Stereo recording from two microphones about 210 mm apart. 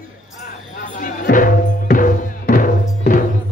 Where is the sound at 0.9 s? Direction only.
40° left (ahead or behind).